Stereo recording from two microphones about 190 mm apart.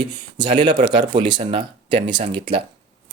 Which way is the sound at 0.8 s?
40° right (ahead or behind).